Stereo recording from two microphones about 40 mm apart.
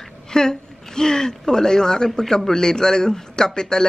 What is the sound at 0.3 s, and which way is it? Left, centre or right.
A woman's voice, centre.